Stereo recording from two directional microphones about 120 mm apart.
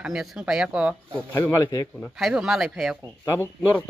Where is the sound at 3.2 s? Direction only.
25° left (ahead or behind).